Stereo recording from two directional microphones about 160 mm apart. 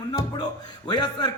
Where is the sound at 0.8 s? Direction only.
25° left (ahead or behind).